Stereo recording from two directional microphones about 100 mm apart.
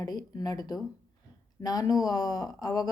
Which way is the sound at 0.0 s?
40° left (ahead or behind).